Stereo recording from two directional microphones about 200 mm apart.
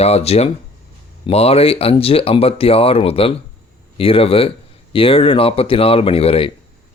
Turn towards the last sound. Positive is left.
turn(degrees=30)  # may be behind; listen again after turning